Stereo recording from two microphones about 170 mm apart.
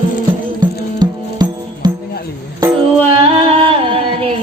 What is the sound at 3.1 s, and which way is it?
Music, 35° right (ahead or behind).